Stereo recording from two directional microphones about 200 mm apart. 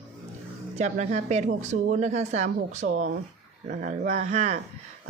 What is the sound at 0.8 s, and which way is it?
A woman's voice, 35° right (ahead or behind).